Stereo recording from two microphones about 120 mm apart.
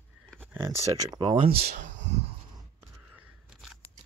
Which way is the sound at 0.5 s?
25° right (ahead or behind).